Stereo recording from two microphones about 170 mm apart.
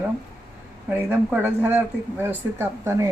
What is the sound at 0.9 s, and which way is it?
Speech, 10° right (ahead or behind).